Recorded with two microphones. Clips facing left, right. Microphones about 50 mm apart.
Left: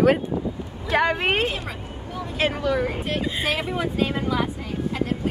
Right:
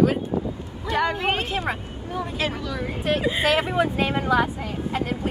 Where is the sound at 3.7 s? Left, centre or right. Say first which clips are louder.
Right 2 dB; right.